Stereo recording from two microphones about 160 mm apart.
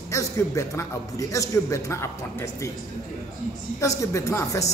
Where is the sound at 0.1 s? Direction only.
20° left (ahead or behind).